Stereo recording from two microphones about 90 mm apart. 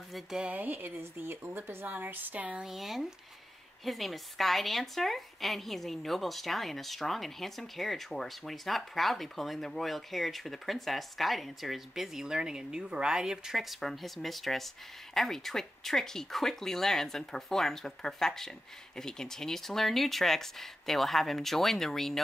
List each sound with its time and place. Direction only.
0.1 s a woman's voice: 5° right (ahead or behind)
0.5 s speech: 20° right (ahead or behind)
2.7 s a woman's voice: 5° right (ahead or behind)